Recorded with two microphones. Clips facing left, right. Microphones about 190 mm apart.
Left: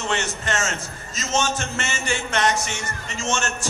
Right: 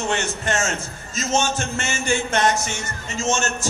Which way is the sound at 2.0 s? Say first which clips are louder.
Right 3 dB; 50° right (ahead or behind).